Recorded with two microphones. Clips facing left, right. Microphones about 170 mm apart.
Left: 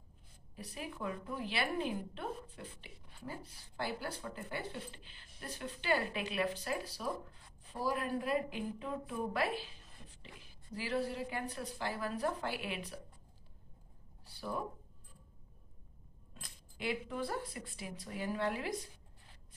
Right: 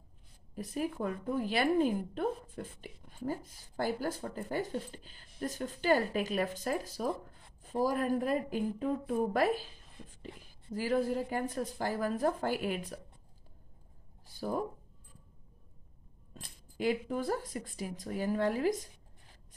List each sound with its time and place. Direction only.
0.6 s a woman's voice: 45° right (ahead or behind)
14.2 s a sound: 45° right (ahead or behind)
16.7 s a woman's voice: 40° right (ahead or behind)